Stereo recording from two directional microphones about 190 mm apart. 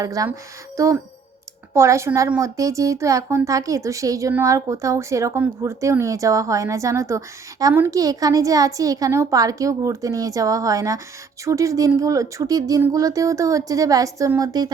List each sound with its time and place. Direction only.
0.0 s speech: 20° right (ahead or behind)